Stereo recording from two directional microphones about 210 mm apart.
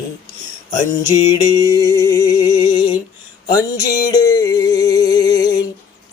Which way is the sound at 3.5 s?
15° left (ahead or behind).